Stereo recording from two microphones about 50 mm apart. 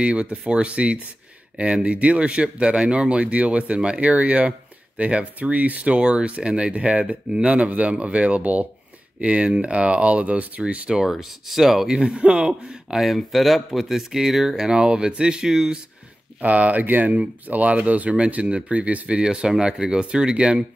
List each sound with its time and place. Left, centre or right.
0.0 s speech: right
11.0 s speech: centre
12.0 s speech: centre
13.0 s speech: centre
16.3 s speech: right
19.2 s speech: centre